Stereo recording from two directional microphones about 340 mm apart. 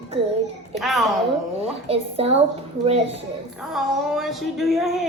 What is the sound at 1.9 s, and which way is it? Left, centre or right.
Speech, centre.